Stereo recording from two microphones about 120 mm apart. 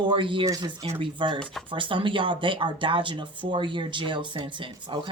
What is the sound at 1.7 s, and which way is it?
Speech, 45° right (ahead or behind).